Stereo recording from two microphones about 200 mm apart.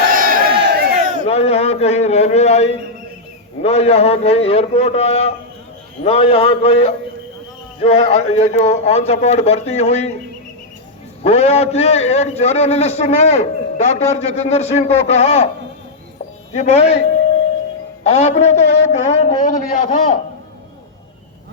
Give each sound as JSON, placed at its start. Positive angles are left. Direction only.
{"t": 0.1, "sound": "crowd", "side_deg": -45}
{"t": 1.2, "sound": "a man's voice", "side_deg": 30}
{"t": 11.2, "sound": "a man's voice", "side_deg": 30}
{"t": 16.5, "sound": "a man's voice", "side_deg": 35}
{"t": 18.0, "sound": "a man's voice", "side_deg": 35}